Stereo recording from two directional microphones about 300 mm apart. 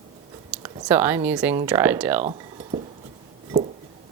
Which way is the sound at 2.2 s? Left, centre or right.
Centre.